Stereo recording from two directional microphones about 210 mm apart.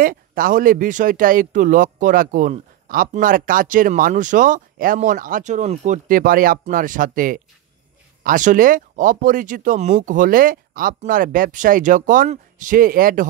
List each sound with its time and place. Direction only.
0.0 s speech: 40° right (ahead or behind)